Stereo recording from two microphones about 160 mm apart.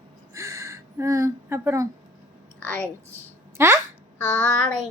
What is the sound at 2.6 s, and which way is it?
Speech, 10° left (ahead or behind).